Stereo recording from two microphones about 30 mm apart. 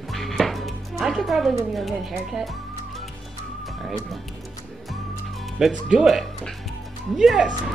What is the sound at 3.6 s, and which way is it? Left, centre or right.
Music, centre.